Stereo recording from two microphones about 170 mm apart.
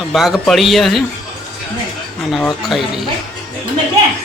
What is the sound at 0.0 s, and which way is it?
Speech, centre (ahead or behind).